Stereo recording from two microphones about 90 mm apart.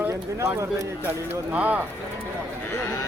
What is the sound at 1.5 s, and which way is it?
Speech, 15° right (ahead or behind).